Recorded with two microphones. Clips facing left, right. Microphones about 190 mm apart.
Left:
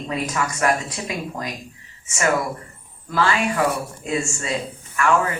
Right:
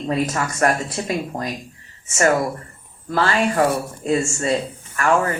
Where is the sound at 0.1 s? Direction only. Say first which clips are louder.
Right 3 dB; 45° right (ahead or behind).